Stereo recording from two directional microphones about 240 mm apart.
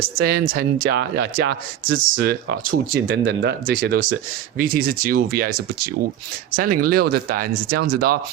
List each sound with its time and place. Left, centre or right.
0.0 s speech: right
2.1 s speech: right